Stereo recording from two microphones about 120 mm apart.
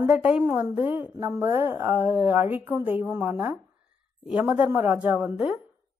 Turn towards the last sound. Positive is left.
turn(degrees=-10)  # may be behind; listen again after turning